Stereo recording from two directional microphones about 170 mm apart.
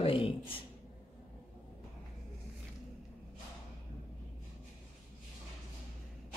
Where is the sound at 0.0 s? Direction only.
35° left (ahead or behind).